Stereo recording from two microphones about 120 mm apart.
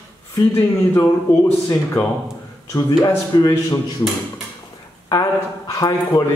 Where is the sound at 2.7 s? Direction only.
30° left (ahead or behind).